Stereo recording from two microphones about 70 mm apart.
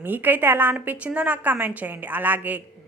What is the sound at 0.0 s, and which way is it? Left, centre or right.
A woman's voice, right.